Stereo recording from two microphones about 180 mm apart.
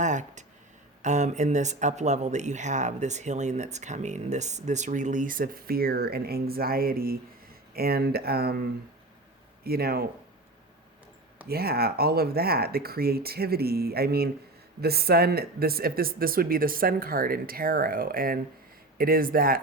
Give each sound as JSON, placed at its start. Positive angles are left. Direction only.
{"t": 0.0, "sound": "speech", "side_deg": -40}
{"t": 9.6, "sound": "speech", "side_deg": -60}
{"t": 11.4, "sound": "speech", "side_deg": -60}